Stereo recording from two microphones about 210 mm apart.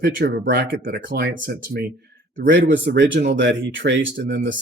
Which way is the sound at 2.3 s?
60° right (ahead or behind).